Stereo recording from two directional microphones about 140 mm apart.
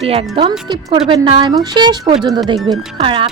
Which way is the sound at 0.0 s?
45° right (ahead or behind).